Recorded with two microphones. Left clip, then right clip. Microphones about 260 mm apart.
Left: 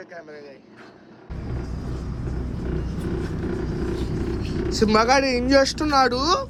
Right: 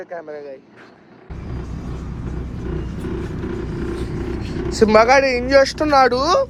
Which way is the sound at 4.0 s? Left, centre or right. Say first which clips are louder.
Right 2 dB; centre.